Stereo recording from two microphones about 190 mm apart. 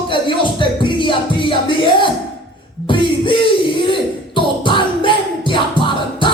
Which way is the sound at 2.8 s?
25° left (ahead or behind).